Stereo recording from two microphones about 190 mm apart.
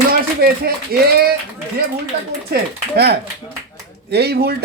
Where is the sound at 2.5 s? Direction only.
60° right (ahead or behind).